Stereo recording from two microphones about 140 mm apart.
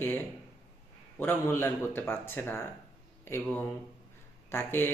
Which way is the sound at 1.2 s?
15° left (ahead or behind).